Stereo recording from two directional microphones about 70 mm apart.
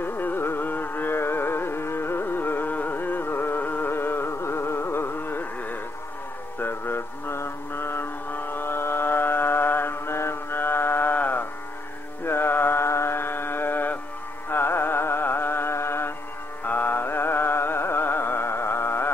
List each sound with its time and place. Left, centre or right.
0.0 s music: left
6.6 s mantra: left
12.3 s music: left
16.6 s music: left